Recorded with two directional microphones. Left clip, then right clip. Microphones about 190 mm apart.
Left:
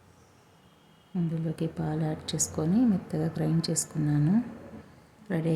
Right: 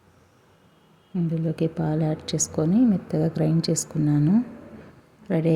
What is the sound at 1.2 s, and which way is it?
A woman's voice, 20° right (ahead or behind).